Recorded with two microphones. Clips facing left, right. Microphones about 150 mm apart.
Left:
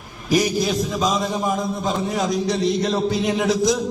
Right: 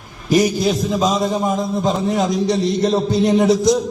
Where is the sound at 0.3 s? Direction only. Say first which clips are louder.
Right 4 dB; centre (ahead or behind).